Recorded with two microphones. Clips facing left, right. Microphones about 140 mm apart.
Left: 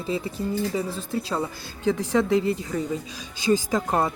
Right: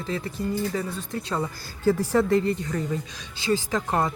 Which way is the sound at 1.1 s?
5° left (ahead or behind).